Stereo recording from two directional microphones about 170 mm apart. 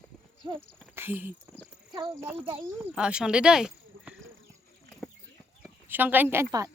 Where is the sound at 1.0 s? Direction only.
10° right (ahead or behind).